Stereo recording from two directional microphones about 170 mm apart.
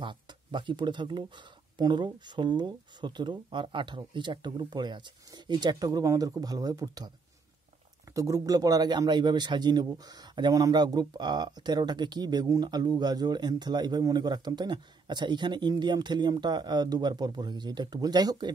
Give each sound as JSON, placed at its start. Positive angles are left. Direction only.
{"t": 0.0, "sound": "speech", "side_deg": -30}
{"t": 8.1, "sound": "speech", "side_deg": -20}